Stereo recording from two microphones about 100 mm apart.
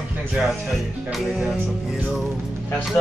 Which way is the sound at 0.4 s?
Centre (ahead or behind).